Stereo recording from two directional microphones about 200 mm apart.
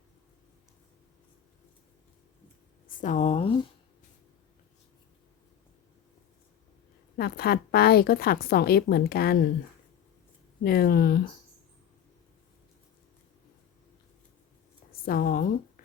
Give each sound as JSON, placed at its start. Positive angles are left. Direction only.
{"t": 2.8, "sound": "speech", "side_deg": 40}
{"t": 7.2, "sound": "a woman's voice", "side_deg": 50}
{"t": 10.6, "sound": "a woman's voice", "side_deg": 50}
{"t": 15.0, "sound": "a woman's voice", "side_deg": 45}